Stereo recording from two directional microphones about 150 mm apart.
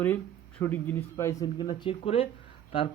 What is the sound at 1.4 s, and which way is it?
Speech, 30° left (ahead or behind).